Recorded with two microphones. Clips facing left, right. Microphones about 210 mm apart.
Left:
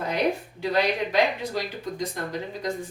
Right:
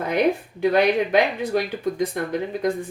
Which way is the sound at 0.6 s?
55° right (ahead or behind).